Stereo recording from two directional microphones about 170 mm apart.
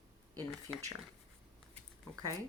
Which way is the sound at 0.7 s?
15° left (ahead or behind).